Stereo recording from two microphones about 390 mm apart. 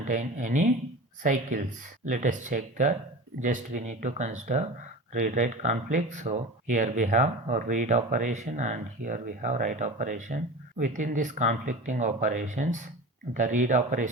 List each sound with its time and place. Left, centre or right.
0.0 s speech: centre